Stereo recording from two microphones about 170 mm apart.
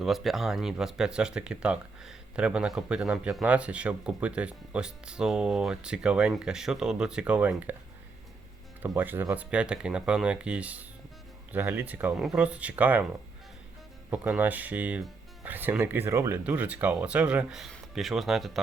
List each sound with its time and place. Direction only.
0.0 s speech: centre (ahead or behind)
9.0 s speech: 10° right (ahead or behind)
14.1 s speech: 10° right (ahead or behind)